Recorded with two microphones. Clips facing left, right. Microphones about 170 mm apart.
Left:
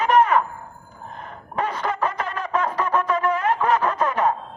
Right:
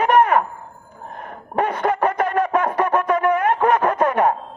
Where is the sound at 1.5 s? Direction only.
60° right (ahead or behind).